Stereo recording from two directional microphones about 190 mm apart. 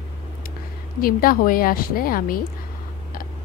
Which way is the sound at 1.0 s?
50° left (ahead or behind).